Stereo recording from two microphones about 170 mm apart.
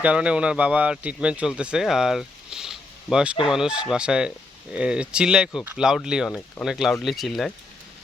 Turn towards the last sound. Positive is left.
turn(degrees=0)  # may be behind; listen again after turning